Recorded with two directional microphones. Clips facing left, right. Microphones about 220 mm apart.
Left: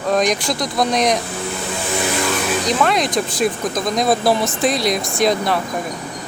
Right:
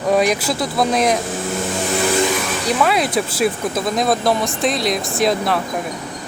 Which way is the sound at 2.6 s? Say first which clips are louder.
Right 2 dB; 5° right (ahead or behind).